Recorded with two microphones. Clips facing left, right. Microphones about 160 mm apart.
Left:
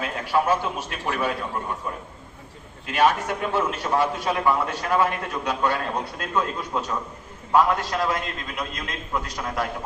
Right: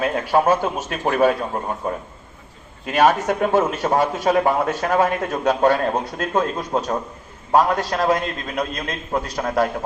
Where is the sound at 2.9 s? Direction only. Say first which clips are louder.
Right 4 dB; 45° right (ahead or behind).